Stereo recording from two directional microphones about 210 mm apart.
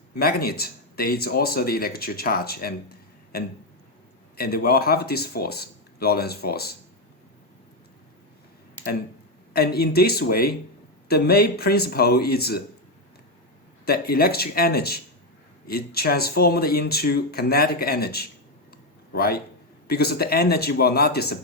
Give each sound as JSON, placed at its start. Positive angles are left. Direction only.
{"t": 0.2, "sound": "speech", "side_deg": 45}
{"t": 9.5, "sound": "speech", "side_deg": 45}
{"t": 13.8, "sound": "speech", "side_deg": 45}